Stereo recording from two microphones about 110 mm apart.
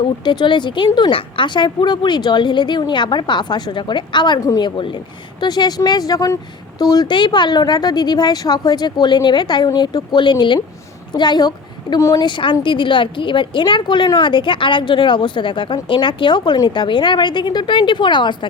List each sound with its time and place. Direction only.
0.3 s a woman's voice: 45° left (ahead or behind); by 12.2 s 30° left (ahead or behind)
12.2 s a woman's voice: 50° left (ahead or behind)